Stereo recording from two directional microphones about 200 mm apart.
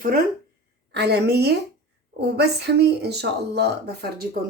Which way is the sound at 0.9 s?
55° right (ahead or behind).